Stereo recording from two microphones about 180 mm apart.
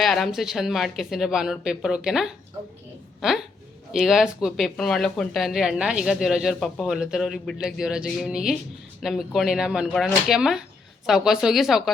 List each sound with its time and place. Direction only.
0.0 s a woman's voice: centre (ahead or behind)